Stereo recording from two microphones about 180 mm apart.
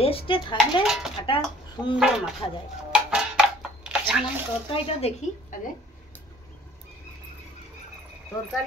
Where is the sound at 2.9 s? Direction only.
5° right (ahead or behind).